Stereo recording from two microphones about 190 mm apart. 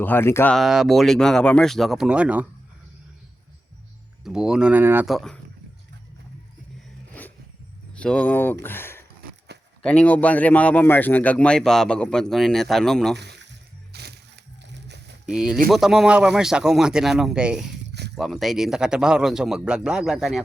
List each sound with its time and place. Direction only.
0.0 s speech: 10° left (ahead or behind)
0.5 s a man's voice: centre (ahead or behind)
4.2 s a man's voice: 5° right (ahead or behind)
5.0 s a man's voice: centre (ahead or behind)
7.1 s vehicle: 10° left (ahead or behind)
7.9 s a man's voice: 5° left (ahead or behind)
13.1 s a sound: 60° right (ahead or behind)
13.9 s music: 60° right (ahead or behind)
14.6 s a sound: 65° right (ahead or behind)
15.3 s a man's voice: 5° right (ahead or behind)
17.8 s a sound: 60° right (ahead or behind)
18.1 s a man's voice: centre (ahead or behind)